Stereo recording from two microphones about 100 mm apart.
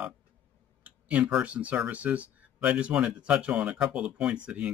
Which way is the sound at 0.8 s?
15° right (ahead or behind).